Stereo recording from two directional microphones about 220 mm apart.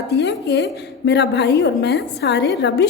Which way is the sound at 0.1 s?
50° left (ahead or behind).